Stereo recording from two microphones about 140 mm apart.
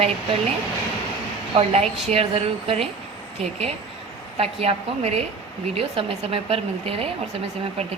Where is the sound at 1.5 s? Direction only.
45° right (ahead or behind).